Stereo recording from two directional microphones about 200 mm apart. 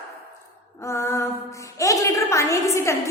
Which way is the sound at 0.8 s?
15° left (ahead or behind).